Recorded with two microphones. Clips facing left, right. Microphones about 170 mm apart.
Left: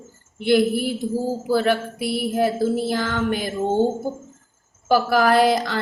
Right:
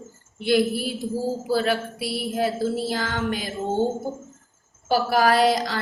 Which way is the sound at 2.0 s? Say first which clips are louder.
Left 4 dB; 55° left (ahead or behind).